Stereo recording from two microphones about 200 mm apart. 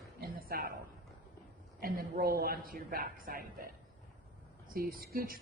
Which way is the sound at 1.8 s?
45° right (ahead or behind).